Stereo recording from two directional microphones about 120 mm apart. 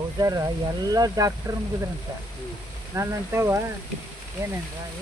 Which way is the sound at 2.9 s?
20° right (ahead or behind).